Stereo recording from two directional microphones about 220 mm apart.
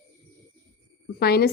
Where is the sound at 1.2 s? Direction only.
45° left (ahead or behind).